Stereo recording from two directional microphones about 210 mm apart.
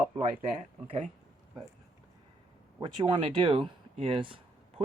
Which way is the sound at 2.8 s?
20° right (ahead or behind).